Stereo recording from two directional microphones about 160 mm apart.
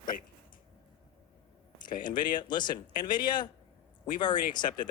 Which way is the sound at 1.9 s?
30° left (ahead or behind).